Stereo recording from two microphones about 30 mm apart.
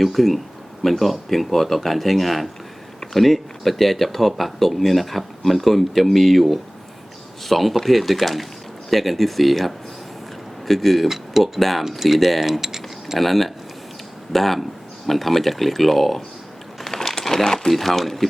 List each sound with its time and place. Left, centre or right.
0.0 s speech: centre
11.1 s speech: centre
11.6 s speech: centre
13.1 s speech: centre
17.2 s crumpling: centre
17.7 s speech: centre